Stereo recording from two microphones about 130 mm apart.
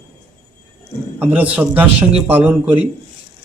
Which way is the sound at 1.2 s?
10° right (ahead or behind).